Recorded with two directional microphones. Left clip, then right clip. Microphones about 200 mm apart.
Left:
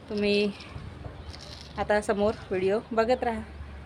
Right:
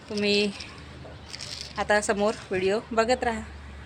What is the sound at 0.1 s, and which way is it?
Speech, centre (ahead or behind).